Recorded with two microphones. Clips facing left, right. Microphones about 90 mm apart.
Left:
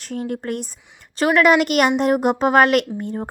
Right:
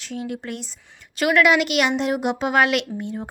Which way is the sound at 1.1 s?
35° left (ahead or behind).